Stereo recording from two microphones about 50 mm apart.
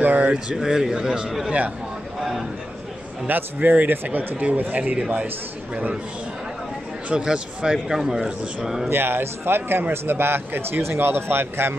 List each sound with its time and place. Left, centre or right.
0.0 s speech: right
0.6 s a man's voice: centre
2.1 s a sound: centre
3.3 s speech: right
4.4 s speech: right
7.1 s a man's voice: right
8.8 s speech: right